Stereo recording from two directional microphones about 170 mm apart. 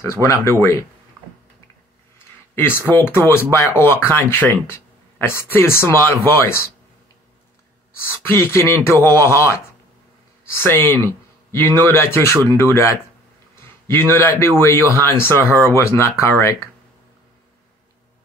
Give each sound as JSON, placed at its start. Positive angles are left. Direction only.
{"t": 0.0, "sound": "speech", "side_deg": 15}
{"t": 2.1, "sound": "a sound", "side_deg": 15}
{"t": 2.9, "sound": "speech", "side_deg": 10}
{"t": 7.9, "sound": "speech", "side_deg": 15}